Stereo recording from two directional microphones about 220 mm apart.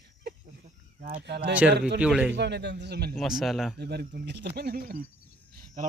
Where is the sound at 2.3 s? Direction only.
50° right (ahead or behind).